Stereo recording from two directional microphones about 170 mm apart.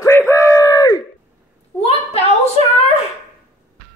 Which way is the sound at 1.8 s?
35° left (ahead or behind).